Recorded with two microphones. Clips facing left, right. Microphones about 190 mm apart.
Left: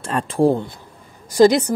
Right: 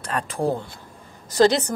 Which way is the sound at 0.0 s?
30° left (ahead or behind).